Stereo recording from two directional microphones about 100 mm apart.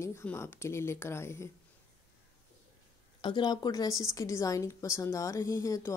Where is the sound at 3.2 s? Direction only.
50° left (ahead or behind).